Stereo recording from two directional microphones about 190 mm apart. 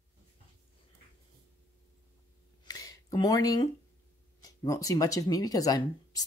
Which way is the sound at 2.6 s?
20° left (ahead or behind).